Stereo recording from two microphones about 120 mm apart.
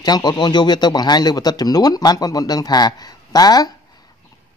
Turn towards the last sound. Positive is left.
turn(degrees=35)  # may be behind; listen again after turning